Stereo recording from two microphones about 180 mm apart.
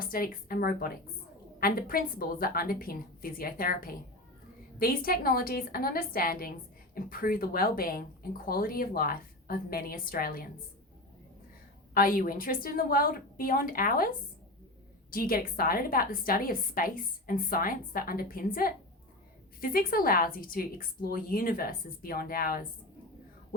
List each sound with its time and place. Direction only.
0.0 s a woman's voice: 55° left (ahead or behind)
11.9 s speech: 50° left (ahead or behind)